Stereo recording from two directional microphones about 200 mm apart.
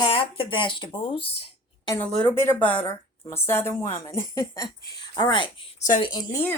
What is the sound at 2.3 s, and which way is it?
A woman's voice, 10° left (ahead or behind).